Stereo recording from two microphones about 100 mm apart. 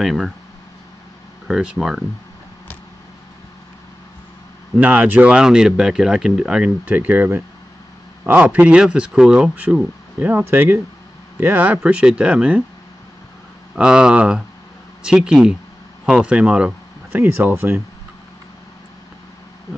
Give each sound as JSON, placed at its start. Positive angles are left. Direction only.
{"t": 0.0, "sound": "speech", "side_deg": 0}
{"t": 1.5, "sound": "speech", "side_deg": -5}
{"t": 4.7, "sound": "speech", "side_deg": -15}
{"t": 10.1, "sound": "speech", "side_deg": -20}
{"t": 13.7, "sound": "speech", "side_deg": -10}